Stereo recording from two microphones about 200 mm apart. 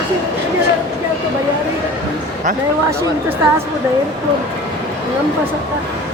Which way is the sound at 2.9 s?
10° right (ahead or behind).